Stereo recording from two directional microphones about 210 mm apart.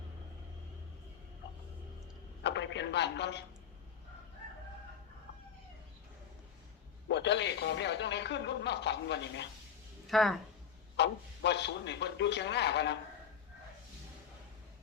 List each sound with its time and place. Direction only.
2.4 s a sound: 55° left (ahead or behind)
7.1 s speech: 55° left (ahead or behind)
10.1 s speech: centre (ahead or behind)
10.9 s speech: 55° left (ahead or behind)